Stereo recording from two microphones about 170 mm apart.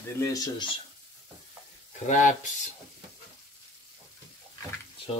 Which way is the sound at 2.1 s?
45° left (ahead or behind).